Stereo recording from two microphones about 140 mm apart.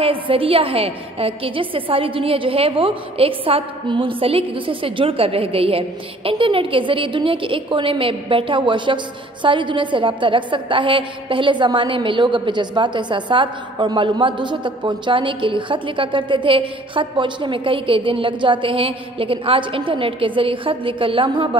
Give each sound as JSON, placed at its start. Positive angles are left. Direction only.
{"t": 0.0, "sound": "a woman's voice", "side_deg": -40}